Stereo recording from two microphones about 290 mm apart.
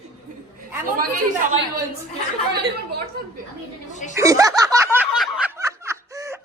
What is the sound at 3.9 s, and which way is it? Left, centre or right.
Speech, left.